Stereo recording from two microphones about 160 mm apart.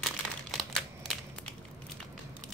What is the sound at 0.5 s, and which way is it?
Crumpling, centre (ahead or behind).